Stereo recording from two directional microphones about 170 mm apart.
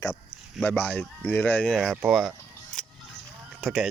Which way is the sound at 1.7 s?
Centre (ahead or behind).